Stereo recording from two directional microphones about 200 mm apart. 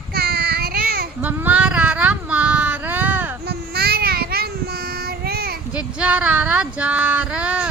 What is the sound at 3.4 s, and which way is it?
Child singing, 55° right (ahead or behind).